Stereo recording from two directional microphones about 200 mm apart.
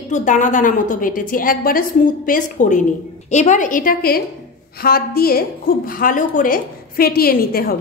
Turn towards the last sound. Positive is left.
turn(degrees=50)  # may be behind; listen again after turning